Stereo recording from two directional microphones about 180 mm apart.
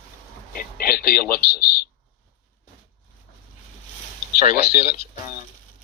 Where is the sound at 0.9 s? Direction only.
55° left (ahead or behind).